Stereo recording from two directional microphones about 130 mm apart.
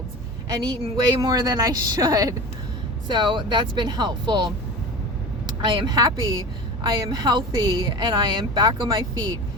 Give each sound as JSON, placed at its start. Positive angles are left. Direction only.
{"t": 0.5, "sound": "a woman's voice", "side_deg": -35}
{"t": 5.6, "sound": "a woman's voice", "side_deg": -35}